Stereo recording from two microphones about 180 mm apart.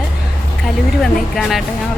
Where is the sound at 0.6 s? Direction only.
Centre (ahead or behind).